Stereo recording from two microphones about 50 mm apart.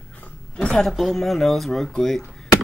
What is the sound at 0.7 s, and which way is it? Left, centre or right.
Speech, centre.